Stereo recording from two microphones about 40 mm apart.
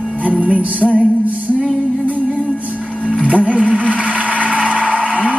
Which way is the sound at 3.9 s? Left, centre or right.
Right.